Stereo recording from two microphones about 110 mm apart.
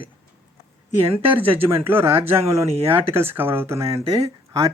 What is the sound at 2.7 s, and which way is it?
Speech, 60° right (ahead or behind).